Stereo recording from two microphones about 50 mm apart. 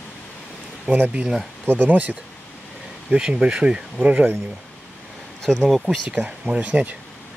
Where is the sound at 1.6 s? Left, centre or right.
Right.